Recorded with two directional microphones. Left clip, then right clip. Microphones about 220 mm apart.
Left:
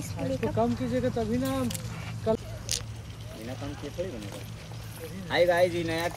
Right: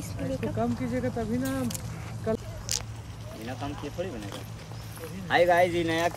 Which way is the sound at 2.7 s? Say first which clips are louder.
Right 1 dB; 30° right (ahead or behind).